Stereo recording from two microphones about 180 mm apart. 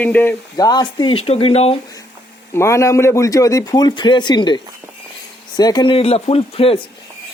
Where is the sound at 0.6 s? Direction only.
20° left (ahead or behind).